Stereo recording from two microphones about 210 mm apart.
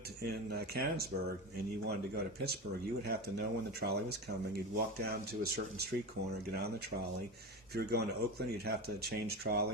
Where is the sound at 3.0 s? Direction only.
45° right (ahead or behind).